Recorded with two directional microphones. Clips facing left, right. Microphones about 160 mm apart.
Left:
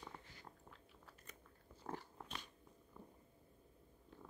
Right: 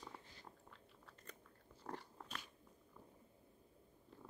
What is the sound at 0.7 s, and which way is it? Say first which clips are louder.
Biting: left 1 dB; 5° left (ahead or behind).